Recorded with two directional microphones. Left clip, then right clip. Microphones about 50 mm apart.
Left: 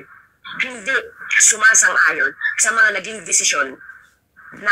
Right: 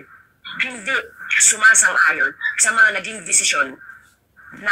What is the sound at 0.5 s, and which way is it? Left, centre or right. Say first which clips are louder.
A man's voice: left 1 dB; left.